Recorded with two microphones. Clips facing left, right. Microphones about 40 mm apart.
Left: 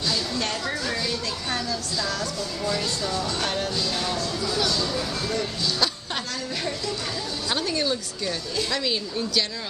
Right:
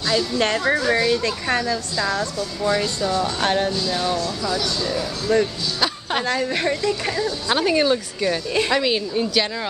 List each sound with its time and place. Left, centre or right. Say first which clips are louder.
0.4 s a woman's voice: right 8 dB; right
3.4 s a woman's voice: right 7 dB; right
5.3 s a woman's voice: right 11 dB; right
7.4 s a woman's voice: right 7 dB; right